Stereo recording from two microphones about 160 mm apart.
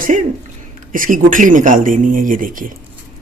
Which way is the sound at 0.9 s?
60° right (ahead or behind).